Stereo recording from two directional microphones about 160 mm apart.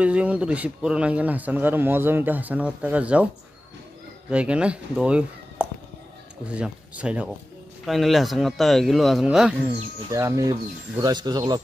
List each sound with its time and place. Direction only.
0.0 s a man's voice: 10° right (ahead or behind)
4.3 s a man's voice: 5° right (ahead or behind)
10.0 s speech: 20° right (ahead or behind)